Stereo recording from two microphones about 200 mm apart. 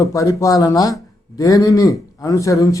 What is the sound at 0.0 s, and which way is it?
A man's voice, 15° left (ahead or behind).